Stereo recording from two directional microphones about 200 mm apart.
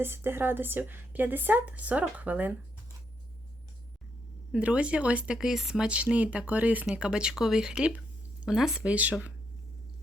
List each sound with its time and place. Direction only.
0.0 s speech: 10° right (ahead or behind)
4.5 s speech: 5° right (ahead or behind)